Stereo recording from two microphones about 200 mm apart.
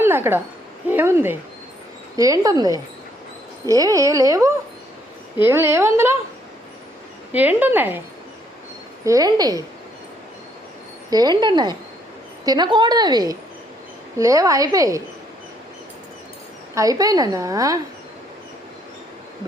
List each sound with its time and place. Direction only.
0.0 s a woman's voice: 10° right (ahead or behind)
7.3 s a woman's voice: 10° right (ahead or behind)
9.0 s a woman's voice: 20° right (ahead or behind)
11.1 s a woman's voice: 20° right (ahead or behind)
16.7 s a woman's voice: 15° right (ahead or behind)